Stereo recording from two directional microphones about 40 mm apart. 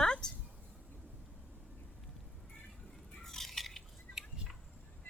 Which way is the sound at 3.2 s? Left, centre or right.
Centre.